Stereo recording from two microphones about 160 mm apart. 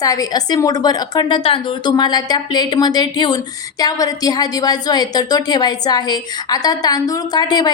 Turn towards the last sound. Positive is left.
turn(degrees=25)  # may be behind; listen again after turning